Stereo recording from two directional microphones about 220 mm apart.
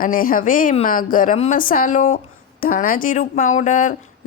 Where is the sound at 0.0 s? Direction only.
40° left (ahead or behind).